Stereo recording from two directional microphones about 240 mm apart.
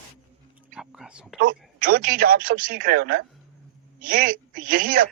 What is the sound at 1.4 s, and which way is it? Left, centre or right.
A man's voice, right.